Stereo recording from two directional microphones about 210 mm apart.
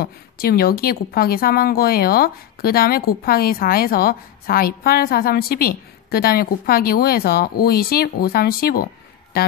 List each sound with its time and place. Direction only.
0.0 s a woman's voice: 45° left (ahead or behind)